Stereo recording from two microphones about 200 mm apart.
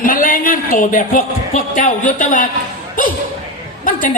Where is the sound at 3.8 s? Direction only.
45° left (ahead or behind).